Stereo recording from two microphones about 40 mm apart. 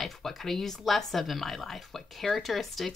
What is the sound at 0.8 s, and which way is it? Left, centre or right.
Speech, centre.